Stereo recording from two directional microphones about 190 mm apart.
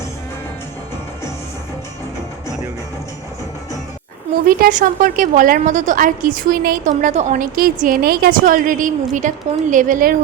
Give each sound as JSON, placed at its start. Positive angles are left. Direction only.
{"t": 4.4, "sound": "a woman's voice", "side_deg": -45}